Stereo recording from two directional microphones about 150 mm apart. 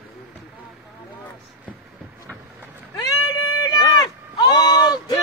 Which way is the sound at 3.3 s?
25° left (ahead or behind).